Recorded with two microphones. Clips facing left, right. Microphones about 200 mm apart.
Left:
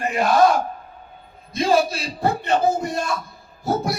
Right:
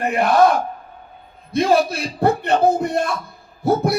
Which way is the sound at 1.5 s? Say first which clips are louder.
Right 2 dB; 60° right (ahead or behind).